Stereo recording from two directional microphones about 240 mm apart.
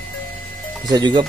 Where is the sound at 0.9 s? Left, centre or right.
Centre.